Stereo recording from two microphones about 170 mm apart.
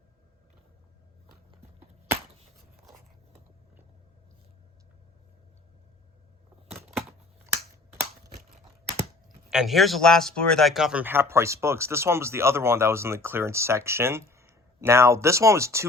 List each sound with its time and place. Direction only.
7.5 s finger snapping: 15° right (ahead or behind)
9.5 s speech: centre (ahead or behind)